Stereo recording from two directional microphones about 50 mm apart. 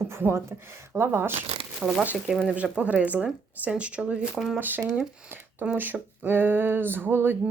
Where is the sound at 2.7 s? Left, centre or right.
Right.